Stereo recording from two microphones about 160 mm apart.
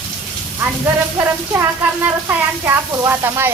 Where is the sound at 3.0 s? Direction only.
15° right (ahead or behind).